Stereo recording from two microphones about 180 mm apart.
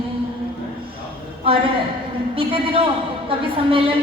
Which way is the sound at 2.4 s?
30° right (ahead or behind).